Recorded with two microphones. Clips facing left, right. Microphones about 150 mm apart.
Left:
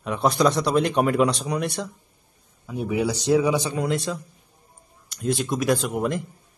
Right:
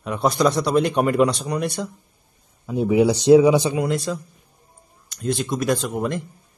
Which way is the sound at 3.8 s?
Centre (ahead or behind).